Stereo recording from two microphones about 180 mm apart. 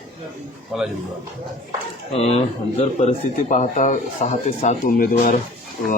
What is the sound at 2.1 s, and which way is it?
Speech, 35° left (ahead or behind).